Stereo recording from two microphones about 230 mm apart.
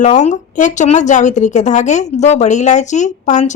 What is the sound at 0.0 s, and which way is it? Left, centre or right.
A woman's voice, left.